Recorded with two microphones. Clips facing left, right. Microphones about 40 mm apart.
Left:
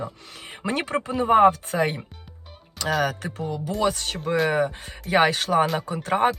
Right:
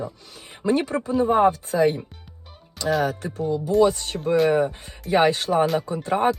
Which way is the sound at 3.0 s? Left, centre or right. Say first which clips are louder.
Right 2 dB; left.